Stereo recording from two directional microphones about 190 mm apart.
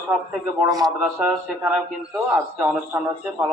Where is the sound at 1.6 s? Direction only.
5° right (ahead or behind).